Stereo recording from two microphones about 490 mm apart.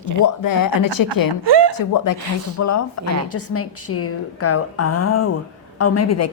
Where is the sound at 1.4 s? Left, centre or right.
Right.